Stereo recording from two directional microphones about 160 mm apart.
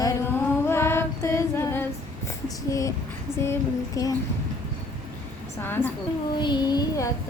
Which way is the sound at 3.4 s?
20° left (ahead or behind).